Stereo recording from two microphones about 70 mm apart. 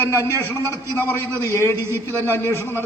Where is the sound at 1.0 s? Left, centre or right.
Left.